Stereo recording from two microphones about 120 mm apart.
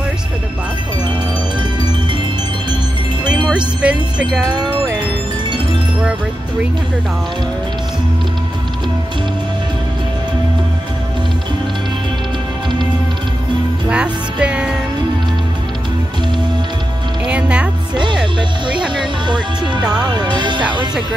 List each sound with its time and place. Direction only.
3.4 s wind chime: 10° right (ahead or behind)
13.8 s music: 10° right (ahead or behind)
17.3 s music: 10° right (ahead or behind)
18.9 s music: 40° right (ahead or behind)
19.8 s speech: 5° right (ahead or behind)
20.1 s speech: 40° right (ahead or behind)